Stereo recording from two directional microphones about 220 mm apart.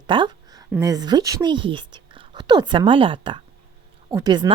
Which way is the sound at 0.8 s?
15° right (ahead or behind).